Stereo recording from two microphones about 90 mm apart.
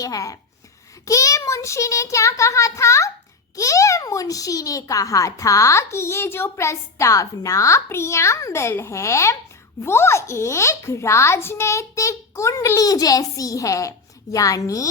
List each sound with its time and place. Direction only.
0.0 s a child's voice: 40° left (ahead or behind)